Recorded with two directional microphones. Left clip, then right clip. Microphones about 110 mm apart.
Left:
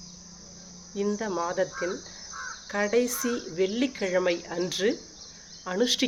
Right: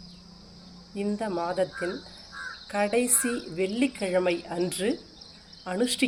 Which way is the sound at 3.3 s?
20° left (ahead or behind).